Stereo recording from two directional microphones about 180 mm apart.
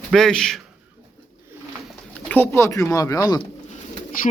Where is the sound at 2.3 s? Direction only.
10° left (ahead or behind).